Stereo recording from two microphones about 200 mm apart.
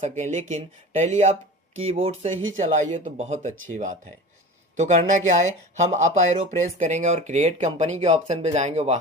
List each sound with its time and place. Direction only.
0.2 s speech: 35° right (ahead or behind)
4.8 s speech: 35° right (ahead or behind)